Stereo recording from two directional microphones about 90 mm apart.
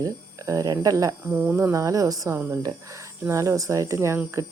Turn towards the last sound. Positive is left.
turn(degrees=-40)  # may be behind; listen again after turning